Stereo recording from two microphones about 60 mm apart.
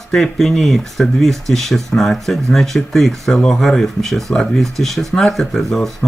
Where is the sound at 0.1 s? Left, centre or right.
Centre.